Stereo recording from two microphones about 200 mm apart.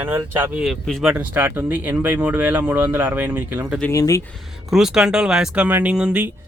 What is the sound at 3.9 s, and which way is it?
Speech, 15° left (ahead or behind).